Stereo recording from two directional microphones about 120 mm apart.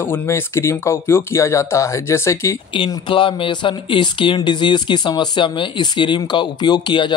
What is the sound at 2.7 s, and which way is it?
Speech, 45° left (ahead or behind).